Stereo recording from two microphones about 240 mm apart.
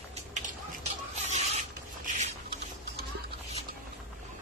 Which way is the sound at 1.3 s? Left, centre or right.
Right.